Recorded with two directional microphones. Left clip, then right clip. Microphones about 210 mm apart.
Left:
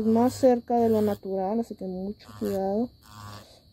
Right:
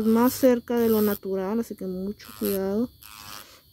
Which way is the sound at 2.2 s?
35° right (ahead or behind).